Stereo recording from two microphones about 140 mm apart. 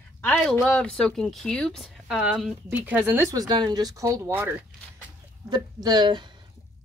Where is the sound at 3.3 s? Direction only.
30° right (ahead or behind); by 4.6 s 15° right (ahead or behind).